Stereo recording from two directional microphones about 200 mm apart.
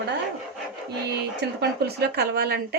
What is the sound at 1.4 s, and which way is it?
Speech, 55° right (ahead or behind).